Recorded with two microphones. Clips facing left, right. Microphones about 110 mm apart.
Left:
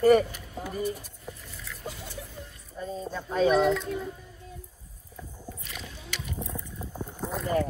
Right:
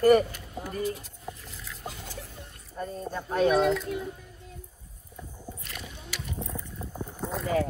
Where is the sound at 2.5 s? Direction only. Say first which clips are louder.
Even; 55° right (ahead or behind).